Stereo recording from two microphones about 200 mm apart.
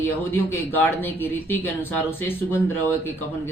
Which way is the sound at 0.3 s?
10° left (ahead or behind).